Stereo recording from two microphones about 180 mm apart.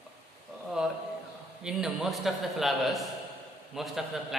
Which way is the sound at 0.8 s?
5° right (ahead or behind).